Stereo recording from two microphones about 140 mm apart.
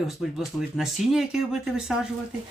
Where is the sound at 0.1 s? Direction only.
Centre (ahead or behind).